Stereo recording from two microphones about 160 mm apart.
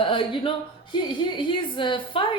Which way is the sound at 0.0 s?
35° left (ahead or behind).